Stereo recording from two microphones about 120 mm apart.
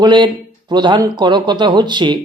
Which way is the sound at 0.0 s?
40° right (ahead or behind).